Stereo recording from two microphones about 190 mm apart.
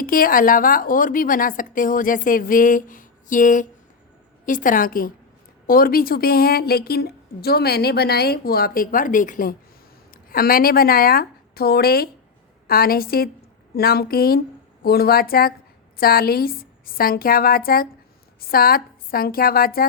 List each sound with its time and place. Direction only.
0.0 s a woman's voice: 50° left (ahead or behind)